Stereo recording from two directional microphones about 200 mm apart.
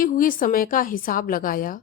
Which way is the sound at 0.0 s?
45° left (ahead or behind).